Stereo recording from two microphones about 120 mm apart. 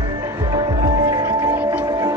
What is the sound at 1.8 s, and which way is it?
Music, 40° right (ahead or behind).